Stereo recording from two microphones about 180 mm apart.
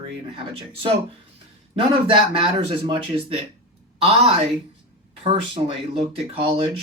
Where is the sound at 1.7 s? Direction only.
30° right (ahead or behind).